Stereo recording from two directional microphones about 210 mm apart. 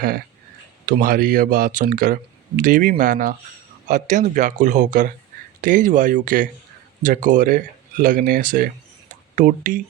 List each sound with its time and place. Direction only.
0.9 s speech: 40° right (ahead or behind)